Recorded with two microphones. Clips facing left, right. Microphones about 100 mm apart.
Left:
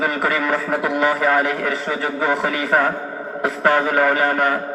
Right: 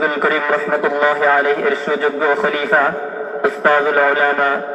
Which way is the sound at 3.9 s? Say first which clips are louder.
Right 3 dB; 35° right (ahead or behind).